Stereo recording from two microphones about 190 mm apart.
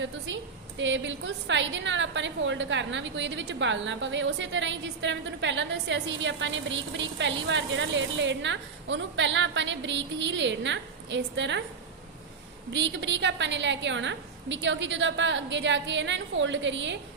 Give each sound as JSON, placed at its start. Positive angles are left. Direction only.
{"t": 0.8, "sound": "a woman's voice", "side_deg": -75}
{"t": 12.7, "sound": "a woman's voice", "side_deg": -70}